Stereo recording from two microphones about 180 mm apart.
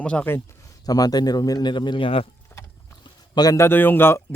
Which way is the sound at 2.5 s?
15° left (ahead or behind).